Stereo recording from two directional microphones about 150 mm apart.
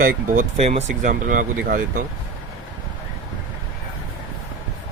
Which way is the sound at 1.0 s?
60° right (ahead or behind).